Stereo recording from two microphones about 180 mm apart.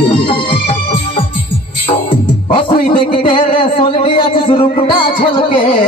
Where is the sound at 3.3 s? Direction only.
25° left (ahead or behind).